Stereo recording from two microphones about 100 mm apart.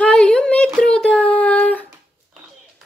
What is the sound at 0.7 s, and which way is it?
Child singing, 10° left (ahead or behind).